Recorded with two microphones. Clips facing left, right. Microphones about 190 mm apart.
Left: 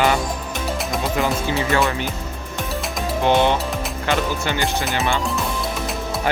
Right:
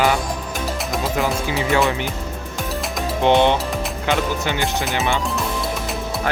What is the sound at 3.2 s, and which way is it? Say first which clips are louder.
Speech: right 2 dB; 20° right (ahead or behind).